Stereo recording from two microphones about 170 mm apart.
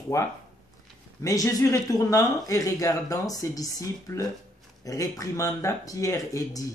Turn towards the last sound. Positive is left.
turn(degrees=20)  # may be behind; listen again after turning